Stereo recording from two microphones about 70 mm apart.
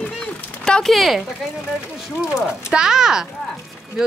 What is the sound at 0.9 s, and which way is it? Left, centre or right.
Speech, centre.